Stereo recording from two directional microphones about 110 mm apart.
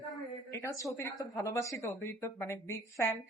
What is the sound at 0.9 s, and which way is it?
A woman's voice, 25° left (ahead or behind).